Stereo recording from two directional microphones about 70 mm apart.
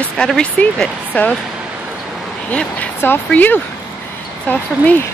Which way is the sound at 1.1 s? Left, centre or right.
Left.